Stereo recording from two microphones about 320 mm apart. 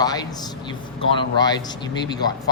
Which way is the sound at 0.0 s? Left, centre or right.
Centre.